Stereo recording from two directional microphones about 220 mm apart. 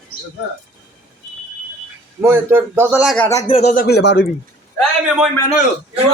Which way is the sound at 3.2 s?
15° left (ahead or behind).